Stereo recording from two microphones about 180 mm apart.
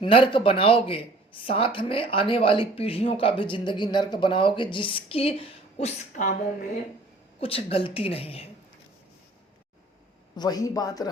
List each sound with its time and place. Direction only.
0.0 s speech: 30° left (ahead or behind)
6.1 s speech: 45° left (ahead or behind)
7.3 s a woman's voice: 30° left (ahead or behind)
10.3 s speech: 20° left (ahead or behind)